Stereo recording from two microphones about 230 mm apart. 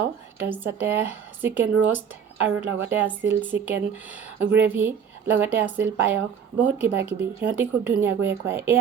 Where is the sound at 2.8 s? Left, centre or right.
Centre.